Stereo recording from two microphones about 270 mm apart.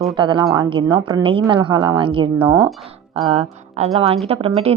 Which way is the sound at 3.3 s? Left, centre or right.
Right.